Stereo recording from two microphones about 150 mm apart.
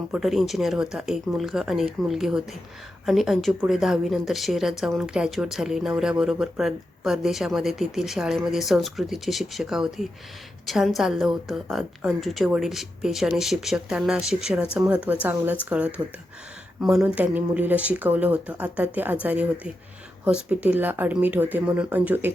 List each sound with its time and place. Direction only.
0.1 s speech: centre (ahead or behind)